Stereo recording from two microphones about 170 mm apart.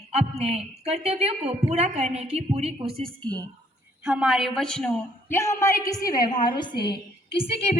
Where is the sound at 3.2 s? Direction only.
25° right (ahead or behind).